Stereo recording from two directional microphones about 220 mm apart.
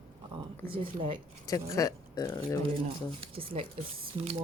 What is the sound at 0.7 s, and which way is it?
Speech, 25° right (ahead or behind).